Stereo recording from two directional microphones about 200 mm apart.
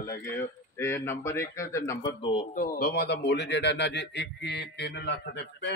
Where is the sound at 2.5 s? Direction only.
50° left (ahead or behind).